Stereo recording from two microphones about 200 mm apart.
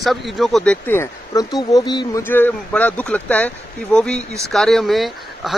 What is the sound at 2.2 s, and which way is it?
Speech, 10° left (ahead or behind).